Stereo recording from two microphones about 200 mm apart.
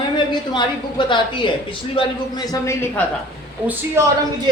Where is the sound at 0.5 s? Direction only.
25° left (ahead or behind).